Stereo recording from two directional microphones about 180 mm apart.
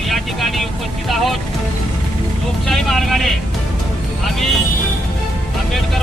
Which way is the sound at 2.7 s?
Centre (ahead or behind).